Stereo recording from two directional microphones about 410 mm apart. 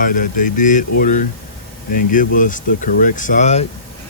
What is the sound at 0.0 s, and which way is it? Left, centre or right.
Speech, centre.